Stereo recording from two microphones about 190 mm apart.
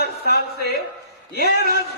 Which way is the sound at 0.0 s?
55° left (ahead or behind).